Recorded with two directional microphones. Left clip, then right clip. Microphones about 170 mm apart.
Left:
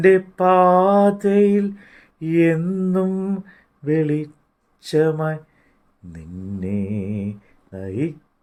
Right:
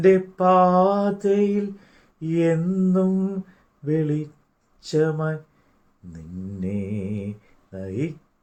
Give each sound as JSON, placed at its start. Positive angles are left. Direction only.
{"t": 0.0, "sound": "mantra", "side_deg": 50}